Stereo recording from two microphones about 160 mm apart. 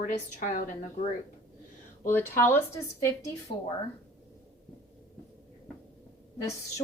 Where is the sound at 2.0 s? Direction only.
15° left (ahead or behind).